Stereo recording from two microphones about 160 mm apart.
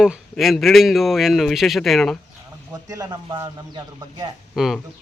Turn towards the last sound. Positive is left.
turn(degrees=0)  # may be behind; listen again after turning